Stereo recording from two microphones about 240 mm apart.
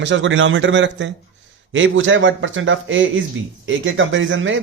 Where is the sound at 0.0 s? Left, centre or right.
Right.